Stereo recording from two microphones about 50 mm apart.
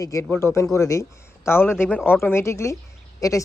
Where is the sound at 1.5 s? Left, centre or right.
Left.